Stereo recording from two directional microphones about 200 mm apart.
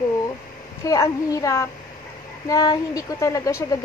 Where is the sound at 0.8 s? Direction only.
15° left (ahead or behind).